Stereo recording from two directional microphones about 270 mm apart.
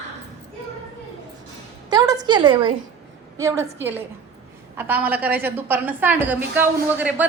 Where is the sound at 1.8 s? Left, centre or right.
Centre.